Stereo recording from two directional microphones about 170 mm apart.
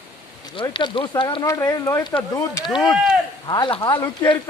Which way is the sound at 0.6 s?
30° left (ahead or behind).